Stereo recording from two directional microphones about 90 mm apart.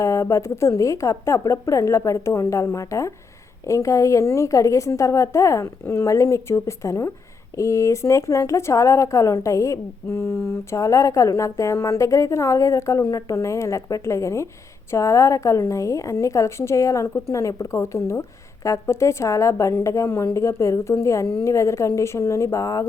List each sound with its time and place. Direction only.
0.0 s speech: 35° left (ahead or behind)